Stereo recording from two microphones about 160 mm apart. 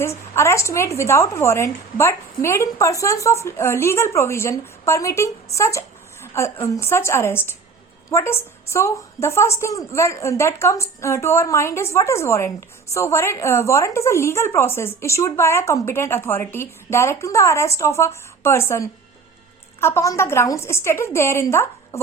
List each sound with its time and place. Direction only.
0.0 s a woman's voice: 15° left (ahead or behind)